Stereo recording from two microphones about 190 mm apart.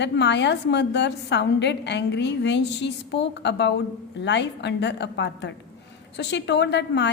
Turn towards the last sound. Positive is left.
turn(degrees=65)  # may be behind; listen again after turning